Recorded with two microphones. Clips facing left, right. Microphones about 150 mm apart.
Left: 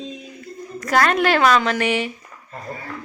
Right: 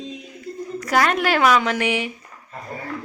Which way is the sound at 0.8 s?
10° right (ahead or behind).